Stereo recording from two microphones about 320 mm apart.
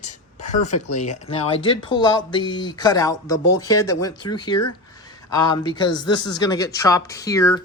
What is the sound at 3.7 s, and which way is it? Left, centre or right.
Speech, left.